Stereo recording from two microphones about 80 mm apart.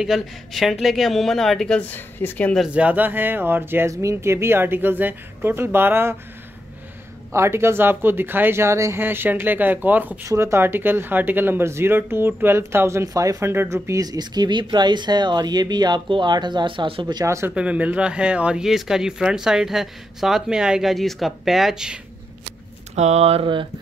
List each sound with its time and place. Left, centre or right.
0.0 s speech: centre
1.8 s speech: left
2.7 s speech: centre
3.9 s speech: right
7.3 s speech: right
9.0 s speech: right
10.2 s speech: right
13.8 s speech: right
17.2 s speech: right
17.6 s speech: centre
23.4 s a sound: right